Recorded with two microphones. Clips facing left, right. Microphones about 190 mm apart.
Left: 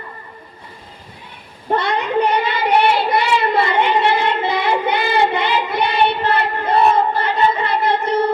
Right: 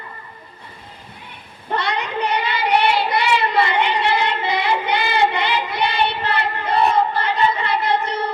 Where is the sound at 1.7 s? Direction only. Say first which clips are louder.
Left 5 dB; 55° left (ahead or behind).